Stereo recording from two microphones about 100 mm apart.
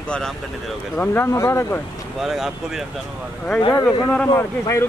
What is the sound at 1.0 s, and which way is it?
Speech, 25° left (ahead or behind).